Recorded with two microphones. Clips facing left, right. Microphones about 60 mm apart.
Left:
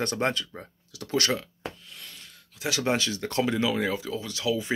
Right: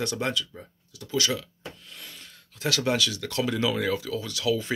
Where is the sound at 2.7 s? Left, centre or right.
Left.